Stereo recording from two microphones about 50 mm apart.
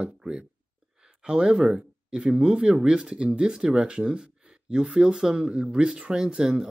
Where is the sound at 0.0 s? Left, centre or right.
Centre.